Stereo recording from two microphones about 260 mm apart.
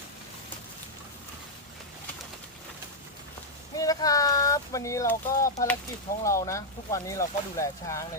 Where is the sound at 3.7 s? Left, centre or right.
Centre.